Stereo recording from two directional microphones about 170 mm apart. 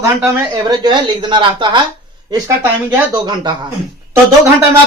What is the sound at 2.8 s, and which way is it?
Speech, 10° right (ahead or behind).